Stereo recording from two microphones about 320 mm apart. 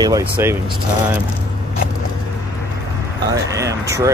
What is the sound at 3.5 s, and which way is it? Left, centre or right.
Speech, centre.